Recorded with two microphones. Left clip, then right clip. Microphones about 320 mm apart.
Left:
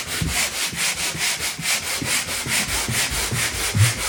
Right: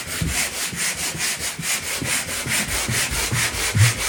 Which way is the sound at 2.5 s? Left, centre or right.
Centre.